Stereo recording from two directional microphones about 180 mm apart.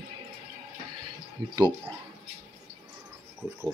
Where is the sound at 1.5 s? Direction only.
15° right (ahead or behind).